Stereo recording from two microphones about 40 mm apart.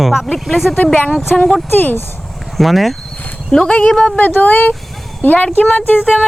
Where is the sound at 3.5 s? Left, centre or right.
Centre.